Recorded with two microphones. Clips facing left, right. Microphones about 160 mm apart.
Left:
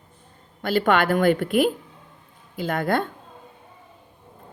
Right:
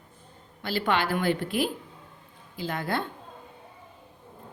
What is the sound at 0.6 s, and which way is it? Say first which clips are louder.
A woman's voice: left 7 dB; 50° left (ahead or behind).